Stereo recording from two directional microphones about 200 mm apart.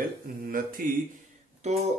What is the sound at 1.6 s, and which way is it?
Speech, 35° right (ahead or behind).